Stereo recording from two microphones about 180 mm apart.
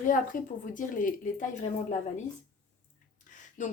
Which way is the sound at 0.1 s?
45° left (ahead or behind).